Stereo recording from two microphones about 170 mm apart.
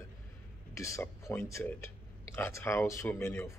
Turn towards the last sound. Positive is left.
turn(degrees=15)  # may be behind; listen again after turning